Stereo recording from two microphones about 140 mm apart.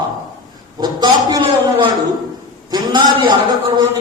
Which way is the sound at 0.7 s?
30° right (ahead or behind).